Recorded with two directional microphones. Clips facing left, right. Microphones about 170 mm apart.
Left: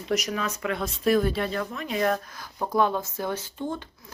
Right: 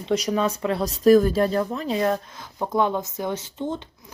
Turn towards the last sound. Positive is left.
turn(degrees=-20)  # may be behind; listen again after turning